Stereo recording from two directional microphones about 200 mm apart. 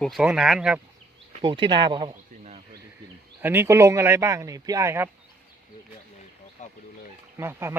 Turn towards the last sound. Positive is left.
turn(degrees=-10)  # may be behind; listen again after turning